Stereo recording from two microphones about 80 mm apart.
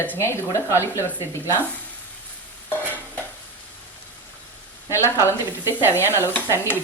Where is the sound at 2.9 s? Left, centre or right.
Left.